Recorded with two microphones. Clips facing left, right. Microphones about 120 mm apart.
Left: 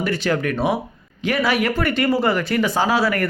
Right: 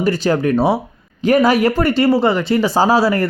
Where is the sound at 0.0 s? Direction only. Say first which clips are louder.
Right 5 dB; 35° right (ahead or behind).